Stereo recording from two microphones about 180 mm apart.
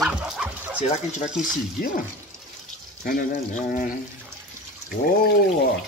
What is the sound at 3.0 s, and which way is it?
Speech, 50° left (ahead or behind).